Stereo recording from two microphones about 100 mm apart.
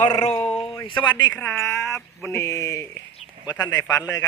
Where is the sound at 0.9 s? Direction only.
50° left (ahead or behind).